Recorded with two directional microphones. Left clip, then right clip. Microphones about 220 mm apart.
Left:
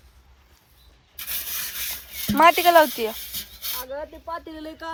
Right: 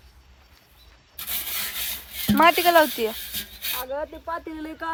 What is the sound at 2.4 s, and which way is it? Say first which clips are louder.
Speech: left 2 dB; centre (ahead or behind).